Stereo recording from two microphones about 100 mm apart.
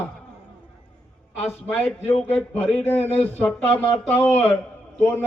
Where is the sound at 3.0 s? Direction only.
90° left.